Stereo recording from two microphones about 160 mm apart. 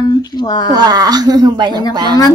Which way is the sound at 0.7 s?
25° right (ahead or behind).